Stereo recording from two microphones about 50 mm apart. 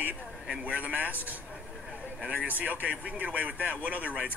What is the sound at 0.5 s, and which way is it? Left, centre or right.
Speech, right.